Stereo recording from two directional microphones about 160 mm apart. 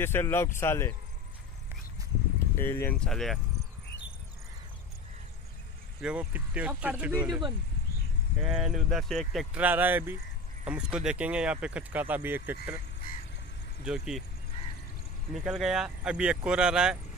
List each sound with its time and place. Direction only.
0.0 s speech: 15° left (ahead or behind)
2.6 s speech: 15° left (ahead or behind)
5.9 s speech: 10° right (ahead or behind)
8.4 s speech: 5° right (ahead or behind)
13.0 s a sound: 60° left (ahead or behind)
13.8 s speech: 5° right (ahead or behind)
15.3 s speech: 5° right (ahead or behind)